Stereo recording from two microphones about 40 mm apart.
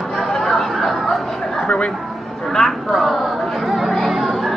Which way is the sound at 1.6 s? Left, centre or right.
Left.